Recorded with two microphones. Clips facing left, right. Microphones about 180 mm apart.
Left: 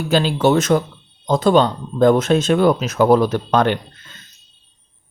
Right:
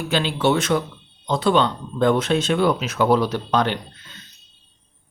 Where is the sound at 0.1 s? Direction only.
40° left (ahead or behind).